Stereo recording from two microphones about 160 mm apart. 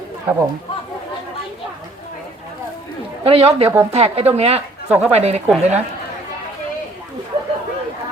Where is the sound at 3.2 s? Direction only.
35° right (ahead or behind).